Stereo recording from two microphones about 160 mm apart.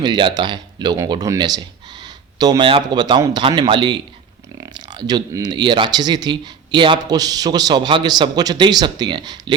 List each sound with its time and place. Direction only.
0.0 s speech: 25° right (ahead or behind)